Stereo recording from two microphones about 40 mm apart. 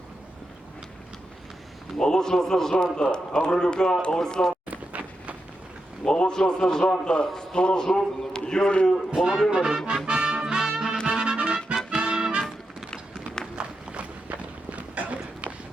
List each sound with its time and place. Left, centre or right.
2.0 s a man's voice: centre
4.7 s a sound: right
6.1 s a man's voice: left
9.5 s speech: centre
10.1 s music: centre
13.6 s run: right